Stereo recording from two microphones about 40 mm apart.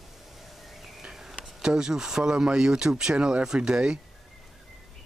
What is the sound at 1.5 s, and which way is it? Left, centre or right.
Speech, centre.